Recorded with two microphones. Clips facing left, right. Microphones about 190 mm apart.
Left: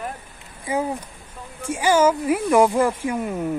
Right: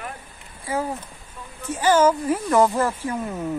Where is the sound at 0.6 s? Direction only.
15° left (ahead or behind).